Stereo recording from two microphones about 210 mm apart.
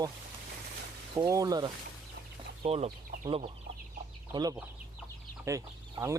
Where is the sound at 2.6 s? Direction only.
30° right (ahead or behind).